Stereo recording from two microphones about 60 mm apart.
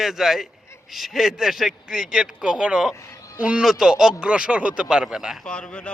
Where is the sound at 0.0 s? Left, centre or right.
Centre.